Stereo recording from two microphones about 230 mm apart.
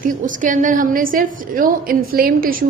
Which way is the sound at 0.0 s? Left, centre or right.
Right.